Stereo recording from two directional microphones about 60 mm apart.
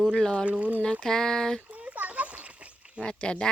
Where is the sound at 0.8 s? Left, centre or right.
Centre.